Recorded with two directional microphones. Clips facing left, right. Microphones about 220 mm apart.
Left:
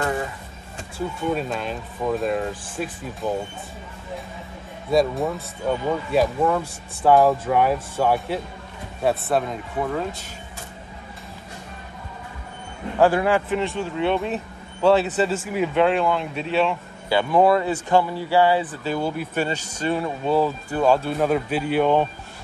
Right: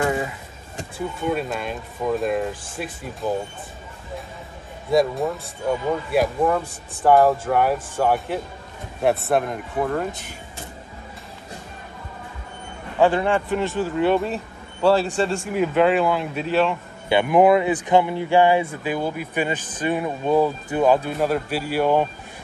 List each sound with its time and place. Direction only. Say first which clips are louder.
0.0 s music: right 2 dB; 15° right (ahead or behind)
1.2 s speech: right 1 dB; 5° right (ahead or behind)
3.2 s speech: right 1 dB; 15° left (ahead or behind)
5.7 s speech: even; 5° right (ahead or behind)
9.3 s speech: right 2 dB; 5° right (ahead or behind)
13.0 s speech: even; 5° left (ahead or behind)
17.1 s speech: right 2 dB; 15° right (ahead or behind)
21.3 s speech: left 2 dB; 5° right (ahead or behind)